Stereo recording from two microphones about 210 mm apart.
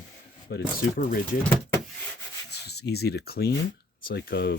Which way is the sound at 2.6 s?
50° left (ahead or behind).